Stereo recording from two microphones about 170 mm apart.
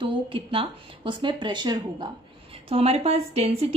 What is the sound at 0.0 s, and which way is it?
A woman's voice, 30° right (ahead or behind).